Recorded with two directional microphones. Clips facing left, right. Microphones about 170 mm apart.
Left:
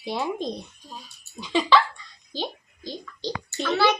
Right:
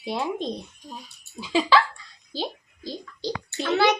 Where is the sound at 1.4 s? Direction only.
5° right (ahead or behind).